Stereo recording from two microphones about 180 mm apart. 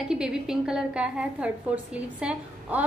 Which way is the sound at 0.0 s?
5° right (ahead or behind).